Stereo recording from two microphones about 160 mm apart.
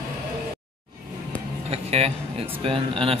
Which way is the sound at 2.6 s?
35° right (ahead or behind).